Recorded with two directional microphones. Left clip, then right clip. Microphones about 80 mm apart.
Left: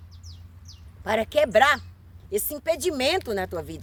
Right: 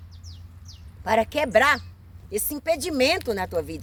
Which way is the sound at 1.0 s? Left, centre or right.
Left.